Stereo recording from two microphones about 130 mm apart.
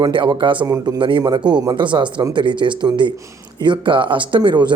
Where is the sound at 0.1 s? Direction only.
40° right (ahead or behind).